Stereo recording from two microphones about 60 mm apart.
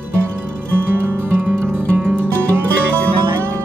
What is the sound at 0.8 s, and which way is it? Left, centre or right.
Music, right.